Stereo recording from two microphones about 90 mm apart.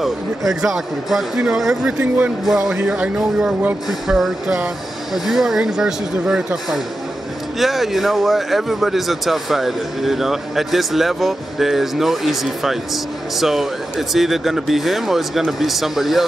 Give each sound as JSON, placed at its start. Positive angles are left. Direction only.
{"t": 0.0, "sound": "speech", "side_deg": 0}